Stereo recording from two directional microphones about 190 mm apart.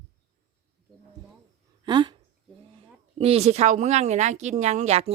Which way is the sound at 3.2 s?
35° right (ahead or behind).